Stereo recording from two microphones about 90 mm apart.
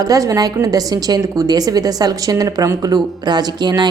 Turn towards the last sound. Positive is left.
turn(degrees=-50)  # may be behind; listen again after turning